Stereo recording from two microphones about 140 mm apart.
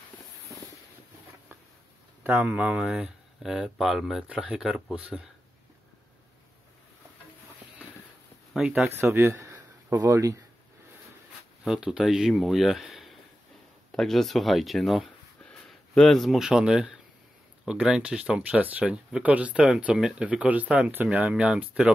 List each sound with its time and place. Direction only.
2.2 s speech: 10° right (ahead or behind)
8.5 s speech: 5° right (ahead or behind)
8.8 s speech: 15° right (ahead or behind)
11.6 s speech: 5° right (ahead or behind)